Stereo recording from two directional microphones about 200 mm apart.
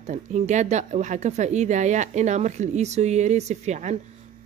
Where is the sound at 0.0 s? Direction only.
35° right (ahead or behind).